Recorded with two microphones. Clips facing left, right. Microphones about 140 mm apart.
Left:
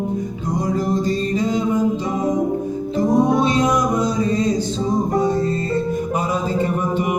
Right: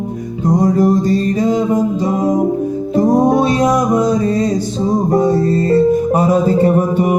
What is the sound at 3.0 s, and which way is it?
Music, 35° right (ahead or behind).